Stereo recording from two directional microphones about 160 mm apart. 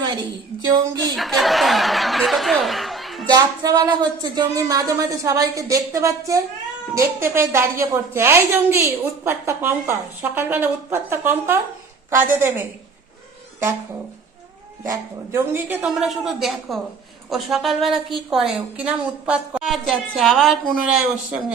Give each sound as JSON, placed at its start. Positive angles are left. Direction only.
{"t": 0.0, "sound": "speech", "side_deg": -25}
{"t": 1.1, "sound": "a woman's voice", "side_deg": 0}
{"t": 3.2, "sound": "a woman's voice", "side_deg": -25}
{"t": 14.8, "sound": "a woman's voice", "side_deg": -15}